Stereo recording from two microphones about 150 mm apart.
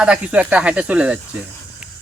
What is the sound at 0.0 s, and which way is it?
A man's voice, 5° right (ahead or behind).